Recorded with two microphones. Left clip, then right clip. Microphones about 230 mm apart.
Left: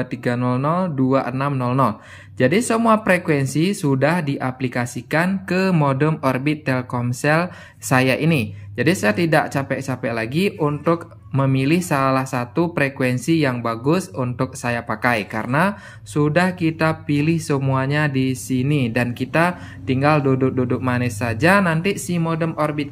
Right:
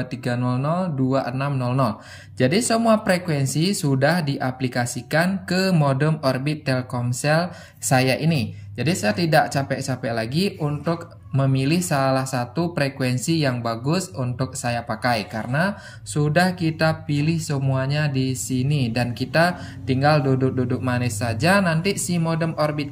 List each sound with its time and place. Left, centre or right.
0.0 s speech: centre